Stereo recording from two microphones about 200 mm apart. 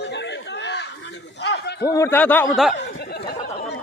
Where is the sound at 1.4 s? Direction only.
55° left (ahead or behind).